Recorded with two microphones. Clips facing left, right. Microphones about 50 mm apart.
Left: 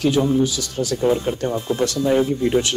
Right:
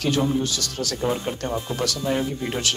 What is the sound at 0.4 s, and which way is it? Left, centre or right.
Speech, centre.